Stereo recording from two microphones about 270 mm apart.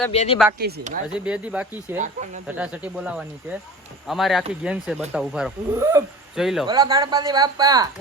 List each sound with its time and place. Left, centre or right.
0.1 s speech: left
1.1 s speech: centre
6.7 s a woman's voice: centre